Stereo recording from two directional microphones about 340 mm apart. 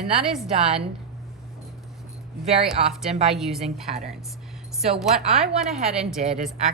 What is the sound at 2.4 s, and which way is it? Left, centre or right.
Speech, centre.